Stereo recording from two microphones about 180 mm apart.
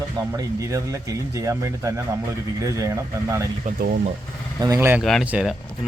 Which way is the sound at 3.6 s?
55° right (ahead or behind).